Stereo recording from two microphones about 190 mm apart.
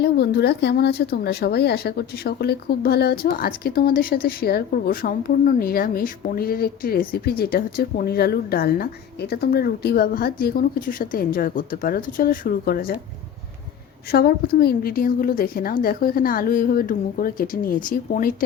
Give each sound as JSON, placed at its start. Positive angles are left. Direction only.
{"t": 0.0, "sound": "speech", "side_deg": 60}
{"t": 14.1, "sound": "speech", "side_deg": 55}